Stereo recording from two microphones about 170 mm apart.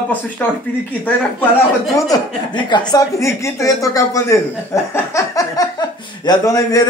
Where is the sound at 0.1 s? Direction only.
10° left (ahead or behind).